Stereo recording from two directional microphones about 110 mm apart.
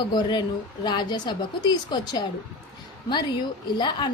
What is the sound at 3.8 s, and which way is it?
Speech, 45° left (ahead or behind).